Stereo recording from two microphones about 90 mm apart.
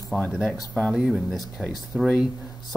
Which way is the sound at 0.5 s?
15° left (ahead or behind).